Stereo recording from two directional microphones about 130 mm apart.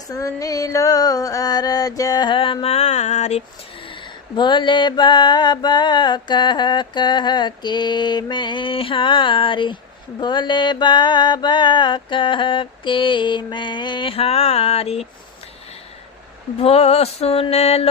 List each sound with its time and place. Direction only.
0.1 s a sound: 25° left (ahead or behind); by 3.4 s 65° left (ahead or behind)
4.4 s mantra: 35° left (ahead or behind); by 15.0 s 50° left (ahead or behind)
16.6 s mantra: 50° left (ahead or behind)